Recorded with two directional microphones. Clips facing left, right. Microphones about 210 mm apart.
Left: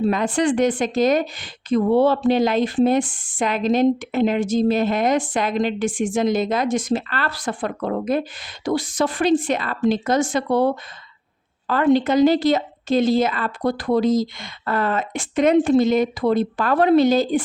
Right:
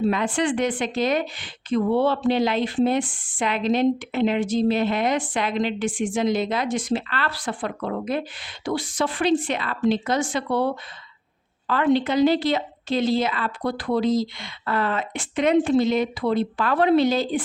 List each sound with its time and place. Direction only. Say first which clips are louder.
0.1 s speech: left 3 dB; 40° left (ahead or behind)
11.7 s speech: left 3 dB; 45° left (ahead or behind)